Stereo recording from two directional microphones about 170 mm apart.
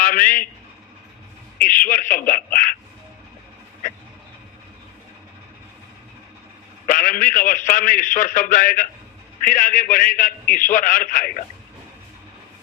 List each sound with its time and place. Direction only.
0.0 s a man's voice: 55° left (ahead or behind)
1.5 s a man's voice: 55° left (ahead or behind)
6.8 s a man's voice: 55° left (ahead or behind)